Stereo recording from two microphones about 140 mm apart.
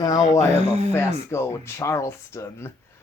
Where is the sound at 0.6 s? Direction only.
50° right (ahead or behind).